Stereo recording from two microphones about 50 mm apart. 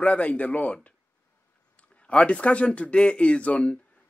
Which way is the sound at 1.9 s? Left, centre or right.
Left.